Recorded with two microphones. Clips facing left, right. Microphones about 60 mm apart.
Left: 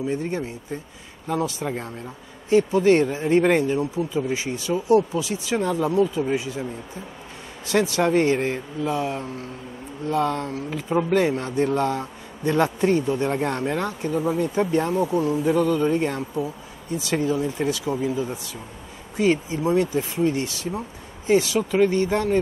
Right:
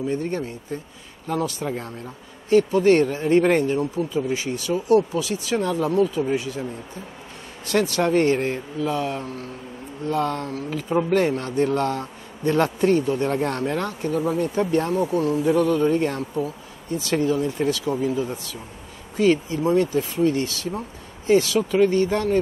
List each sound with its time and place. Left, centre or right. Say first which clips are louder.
0.1 s speech: right 1 dB; centre
21.5 s speech: right 1 dB; left
21.9 s speech: right 1 dB; left